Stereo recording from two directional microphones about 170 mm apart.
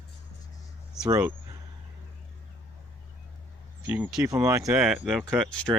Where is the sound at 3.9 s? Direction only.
15° right (ahead or behind).